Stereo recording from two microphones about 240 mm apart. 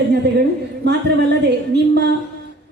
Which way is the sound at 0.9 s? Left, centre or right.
Right.